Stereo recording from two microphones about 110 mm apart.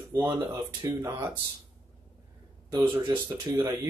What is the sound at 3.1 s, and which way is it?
Speech, 20° right (ahead or behind).